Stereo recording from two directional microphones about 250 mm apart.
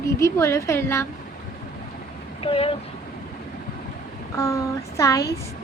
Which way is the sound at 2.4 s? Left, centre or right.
Left.